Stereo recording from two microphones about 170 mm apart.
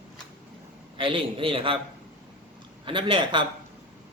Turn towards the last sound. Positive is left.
turn(degrees=-30)  # may be behind; listen again after turning